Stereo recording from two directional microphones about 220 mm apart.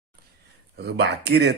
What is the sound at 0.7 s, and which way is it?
Speech, 50° right (ahead or behind).